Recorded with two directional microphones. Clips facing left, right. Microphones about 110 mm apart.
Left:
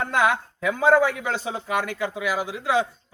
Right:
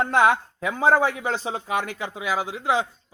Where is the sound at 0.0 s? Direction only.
25° right (ahead or behind).